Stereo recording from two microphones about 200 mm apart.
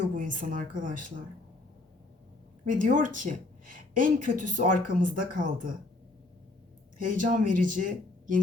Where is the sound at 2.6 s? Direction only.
40° right (ahead or behind).